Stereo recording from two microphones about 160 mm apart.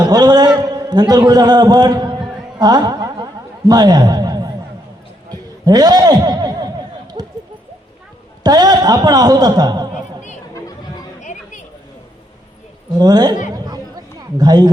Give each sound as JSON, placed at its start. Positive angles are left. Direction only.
{"t": 0.0, "sound": "a man's voice", "side_deg": -25}
{"t": 5.3, "sound": "a sound", "side_deg": -25}
{"t": 8.4, "sound": "a man's voice", "side_deg": -25}
{"t": 11.2, "sound": "chatter", "side_deg": 50}
{"t": 13.0, "sound": "a man's voice", "side_deg": -25}
{"t": 13.5, "sound": "chatter", "side_deg": -25}